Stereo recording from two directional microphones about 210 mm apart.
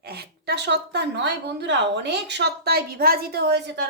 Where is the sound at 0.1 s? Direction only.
50° right (ahead or behind).